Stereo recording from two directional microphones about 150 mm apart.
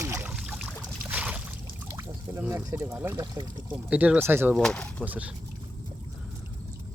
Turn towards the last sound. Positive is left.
turn(degrees=-10)  # may be behind; listen again after turning